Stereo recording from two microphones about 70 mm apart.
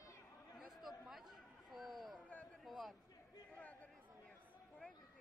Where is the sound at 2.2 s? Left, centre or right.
Left.